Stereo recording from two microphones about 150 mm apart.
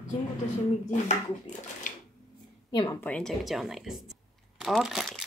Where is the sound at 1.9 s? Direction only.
60° left (ahead or behind).